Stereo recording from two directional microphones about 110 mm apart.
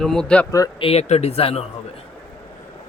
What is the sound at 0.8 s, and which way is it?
Speech, 65° left (ahead or behind).